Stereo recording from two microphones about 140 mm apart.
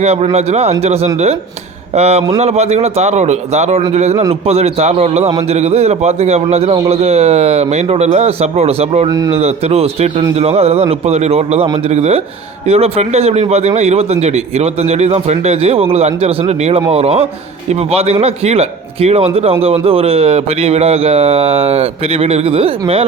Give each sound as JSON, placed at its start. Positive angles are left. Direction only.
{"t": 0.0, "sound": "a man's voice", "side_deg": -50}
{"t": 9.0, "sound": "a man's voice", "side_deg": -25}
{"t": 9.3, "sound": "a man's voice", "side_deg": -50}